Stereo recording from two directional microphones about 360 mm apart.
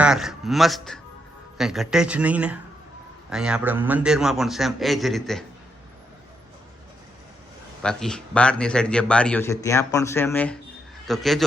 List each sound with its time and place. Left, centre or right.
0.0 s a man's voice: centre
7.8 s a man's voice: centre